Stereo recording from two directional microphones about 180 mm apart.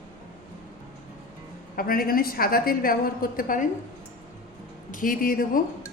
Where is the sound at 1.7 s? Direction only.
55° left (ahead or behind).